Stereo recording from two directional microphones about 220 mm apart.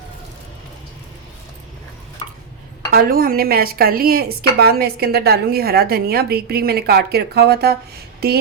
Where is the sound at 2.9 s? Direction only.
40° right (ahead or behind).